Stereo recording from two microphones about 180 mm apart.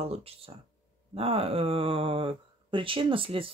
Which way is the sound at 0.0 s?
35° right (ahead or behind).